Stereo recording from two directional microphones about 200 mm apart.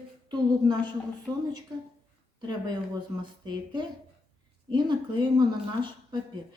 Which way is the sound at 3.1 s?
15° right (ahead or behind).